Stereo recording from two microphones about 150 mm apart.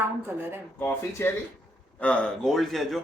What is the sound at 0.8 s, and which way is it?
A man's voice, 15° left (ahead or behind).